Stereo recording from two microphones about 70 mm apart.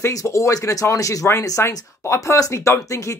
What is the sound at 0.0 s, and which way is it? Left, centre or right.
Speech, left.